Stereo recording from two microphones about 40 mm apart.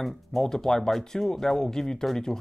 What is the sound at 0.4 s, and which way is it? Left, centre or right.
Speech, centre.